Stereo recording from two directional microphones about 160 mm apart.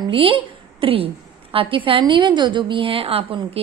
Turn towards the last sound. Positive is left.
turn(degrees=-35)  # may be behind; listen again after turning